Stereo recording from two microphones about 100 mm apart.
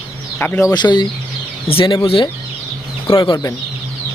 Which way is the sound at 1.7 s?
65° left (ahead or behind).